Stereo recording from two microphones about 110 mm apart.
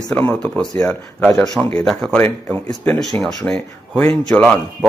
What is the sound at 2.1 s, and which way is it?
Speech, 20° left (ahead or behind).